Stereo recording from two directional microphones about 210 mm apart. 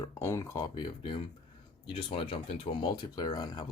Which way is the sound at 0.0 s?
15° left (ahead or behind).